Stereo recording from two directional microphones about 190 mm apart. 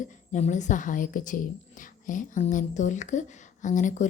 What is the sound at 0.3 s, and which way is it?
A woman's voice, 40° left (ahead or behind).